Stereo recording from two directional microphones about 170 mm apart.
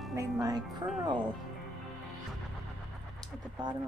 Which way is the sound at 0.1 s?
20° right (ahead or behind).